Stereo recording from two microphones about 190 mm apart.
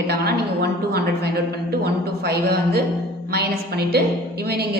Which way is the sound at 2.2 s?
55° right (ahead or behind).